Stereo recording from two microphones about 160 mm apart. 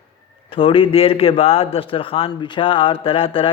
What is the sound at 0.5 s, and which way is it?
A man's voice, 35° left (ahead or behind).